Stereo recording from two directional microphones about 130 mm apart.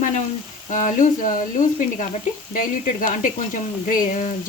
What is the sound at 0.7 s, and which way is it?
Speech, 90° left.